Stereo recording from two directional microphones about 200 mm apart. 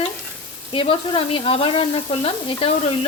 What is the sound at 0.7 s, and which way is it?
Frying, 25° left (ahead or behind).